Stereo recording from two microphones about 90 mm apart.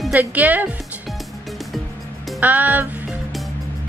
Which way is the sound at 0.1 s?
20° right (ahead or behind).